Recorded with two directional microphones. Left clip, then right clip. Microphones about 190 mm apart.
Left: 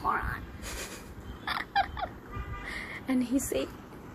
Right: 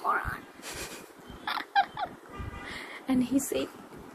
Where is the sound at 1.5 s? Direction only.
5° right (ahead or behind).